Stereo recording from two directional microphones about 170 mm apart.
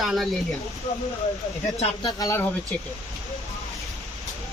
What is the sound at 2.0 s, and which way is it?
Speech, 20° left (ahead or behind).